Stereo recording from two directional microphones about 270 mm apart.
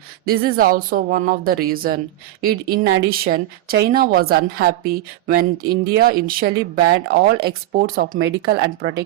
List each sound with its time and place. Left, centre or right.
0.3 s a woman's voice: right